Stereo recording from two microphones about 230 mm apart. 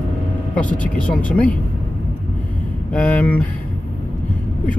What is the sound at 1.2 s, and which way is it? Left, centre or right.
Speech, centre.